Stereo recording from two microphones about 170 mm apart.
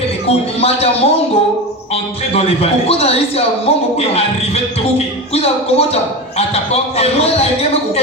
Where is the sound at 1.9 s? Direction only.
35° left (ahead or behind).